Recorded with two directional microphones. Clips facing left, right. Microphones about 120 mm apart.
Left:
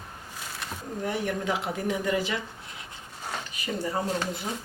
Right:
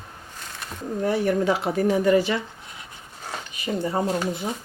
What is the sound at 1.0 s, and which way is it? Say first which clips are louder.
Speech: right 8 dB; 40° right (ahead or behind).